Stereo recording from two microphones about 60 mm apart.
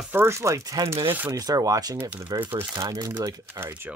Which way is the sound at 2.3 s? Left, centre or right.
Right.